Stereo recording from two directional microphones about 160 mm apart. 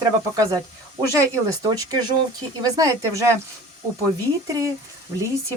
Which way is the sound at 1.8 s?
25° right (ahead or behind).